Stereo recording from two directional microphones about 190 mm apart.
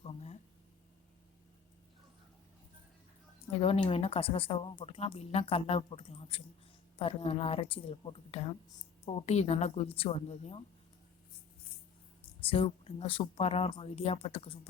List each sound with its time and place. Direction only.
0.0 s a sound: 35° left (ahead or behind)
3.6 s speech: 30° left (ahead or behind)
12.4 s speech: 30° left (ahead or behind)